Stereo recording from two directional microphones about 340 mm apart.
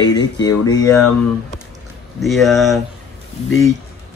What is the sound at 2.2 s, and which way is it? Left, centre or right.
Speech, centre.